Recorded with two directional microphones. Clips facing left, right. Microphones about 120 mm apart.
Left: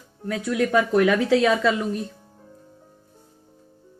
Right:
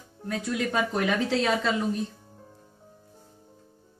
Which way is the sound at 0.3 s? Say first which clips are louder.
Left 6 dB; 90° left.